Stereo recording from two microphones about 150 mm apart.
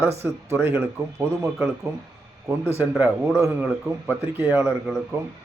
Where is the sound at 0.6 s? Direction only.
15° right (ahead or behind).